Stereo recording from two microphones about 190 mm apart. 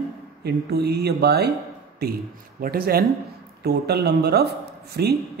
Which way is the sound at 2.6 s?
50° right (ahead or behind).